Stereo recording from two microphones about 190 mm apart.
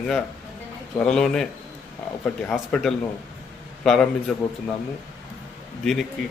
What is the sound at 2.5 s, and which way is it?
Speech, centre (ahead or behind).